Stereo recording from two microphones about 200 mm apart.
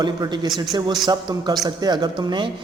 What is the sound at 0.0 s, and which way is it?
A woman's voice, 20° right (ahead or behind).